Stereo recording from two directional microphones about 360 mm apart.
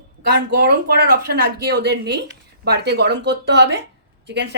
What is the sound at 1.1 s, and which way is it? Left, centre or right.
A woman's voice, right.